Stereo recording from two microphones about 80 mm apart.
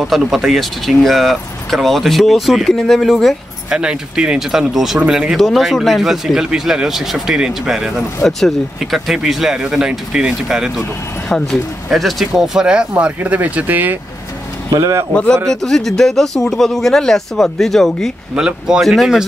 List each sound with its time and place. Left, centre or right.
0.0 s speech: centre
3.7 s speech: centre
11.2 s speech: centre; by 13.9 s right
14.7 s speech: right
15.4 s speech: centre
18.3 s speech: centre